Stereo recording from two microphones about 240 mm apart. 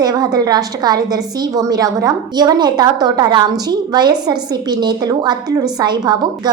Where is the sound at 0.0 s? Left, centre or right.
Centre.